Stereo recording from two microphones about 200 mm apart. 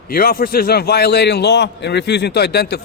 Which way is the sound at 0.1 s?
45° left (ahead or behind).